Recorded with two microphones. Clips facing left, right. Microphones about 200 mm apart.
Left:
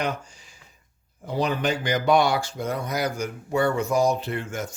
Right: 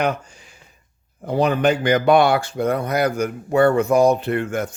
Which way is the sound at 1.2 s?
60° right (ahead or behind).